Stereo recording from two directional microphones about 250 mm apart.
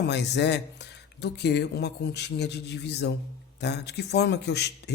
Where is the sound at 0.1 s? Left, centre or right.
Left.